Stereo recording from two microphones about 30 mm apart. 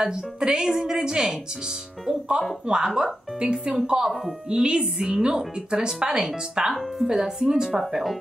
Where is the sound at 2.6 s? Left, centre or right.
Right.